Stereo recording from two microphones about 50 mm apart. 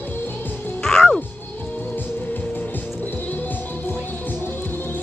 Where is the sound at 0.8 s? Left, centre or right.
Centre.